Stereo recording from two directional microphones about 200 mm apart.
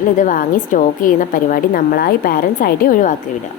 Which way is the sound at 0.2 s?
40° left (ahead or behind).